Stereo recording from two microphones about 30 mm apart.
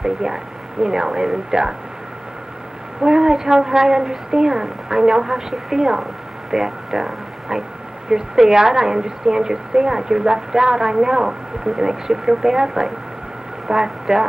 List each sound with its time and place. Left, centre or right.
0.0 s a woman's voice: right
3.0 s a woman's voice: centre